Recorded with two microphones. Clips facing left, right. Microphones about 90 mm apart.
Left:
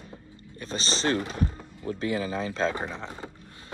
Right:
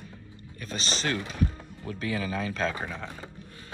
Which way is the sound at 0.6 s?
30° left (ahead or behind).